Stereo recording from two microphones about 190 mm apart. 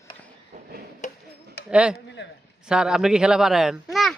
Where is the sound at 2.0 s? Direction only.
65° left (ahead or behind).